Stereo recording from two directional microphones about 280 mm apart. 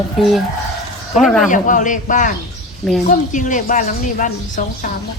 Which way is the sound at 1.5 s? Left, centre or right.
Left.